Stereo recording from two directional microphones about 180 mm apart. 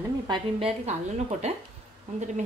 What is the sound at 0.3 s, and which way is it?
A woman's voice, 30° right (ahead or behind).